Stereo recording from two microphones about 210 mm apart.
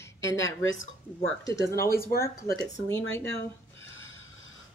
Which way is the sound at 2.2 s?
10° left (ahead or behind).